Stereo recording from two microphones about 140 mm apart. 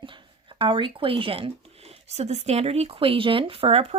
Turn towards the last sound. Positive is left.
turn(degrees=-45)  # may be behind; listen again after turning